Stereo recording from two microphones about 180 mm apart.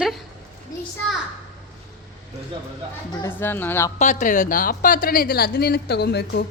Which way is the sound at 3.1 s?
15° left (ahead or behind).